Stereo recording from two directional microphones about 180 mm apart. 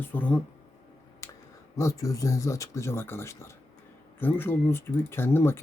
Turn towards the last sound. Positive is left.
turn(degrees=10)  # may be behind; listen again after turning